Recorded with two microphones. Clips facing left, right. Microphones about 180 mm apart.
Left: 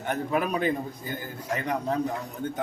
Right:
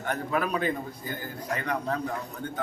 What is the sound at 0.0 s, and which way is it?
A man's voice, 20° left (ahead or behind).